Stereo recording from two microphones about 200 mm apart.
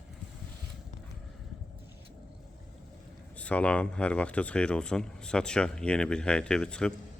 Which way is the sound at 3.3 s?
5° left (ahead or behind).